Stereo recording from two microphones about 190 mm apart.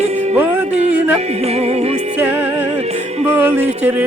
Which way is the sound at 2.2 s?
10° right (ahead or behind).